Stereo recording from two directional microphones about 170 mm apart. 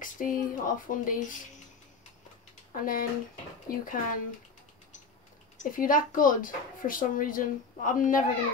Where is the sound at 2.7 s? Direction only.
55° left (ahead or behind).